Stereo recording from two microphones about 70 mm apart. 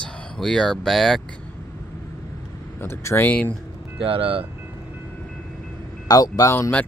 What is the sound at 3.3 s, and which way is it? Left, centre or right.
Speech, left.